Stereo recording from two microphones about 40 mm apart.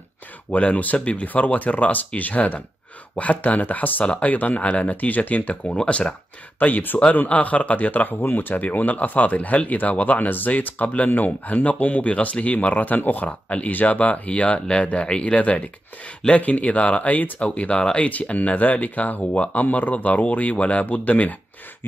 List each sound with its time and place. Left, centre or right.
0.5 s speech: left
6.6 s speech: left
7.1 s speech: left
8.2 s speech: left